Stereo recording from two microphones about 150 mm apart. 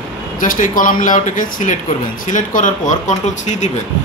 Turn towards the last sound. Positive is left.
turn(degrees=50)  # may be behind; listen again after turning